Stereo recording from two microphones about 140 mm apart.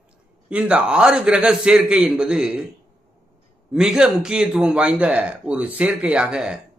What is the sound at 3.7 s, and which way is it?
A man's voice, 5° right (ahead or behind).